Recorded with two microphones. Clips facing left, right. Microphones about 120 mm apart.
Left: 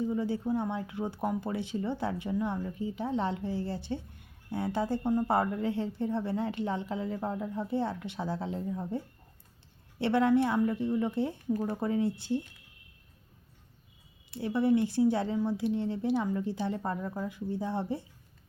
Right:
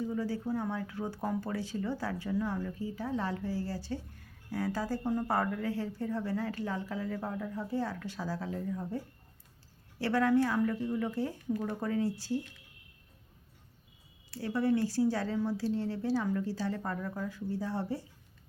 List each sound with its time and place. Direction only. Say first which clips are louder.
0.0 s speech: left 3 dB; 20° left (ahead or behind)
10.0 s speech: left 2 dB; 20° left (ahead or behind)
14.3 s speech: left 3 dB; 20° left (ahead or behind)